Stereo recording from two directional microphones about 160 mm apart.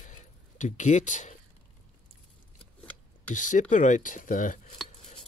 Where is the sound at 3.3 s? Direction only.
50° left (ahead or behind).